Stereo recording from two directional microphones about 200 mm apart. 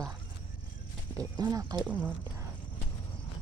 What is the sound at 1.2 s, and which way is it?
Speech, 20° right (ahead or behind).